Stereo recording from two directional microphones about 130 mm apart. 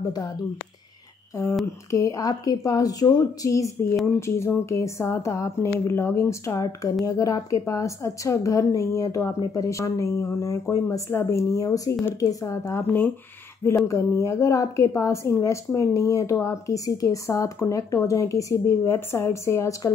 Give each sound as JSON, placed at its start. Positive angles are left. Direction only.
{"t": 1.3, "sound": "a woman's voice", "side_deg": 25}